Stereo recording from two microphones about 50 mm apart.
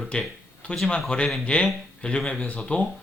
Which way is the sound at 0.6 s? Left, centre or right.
Left.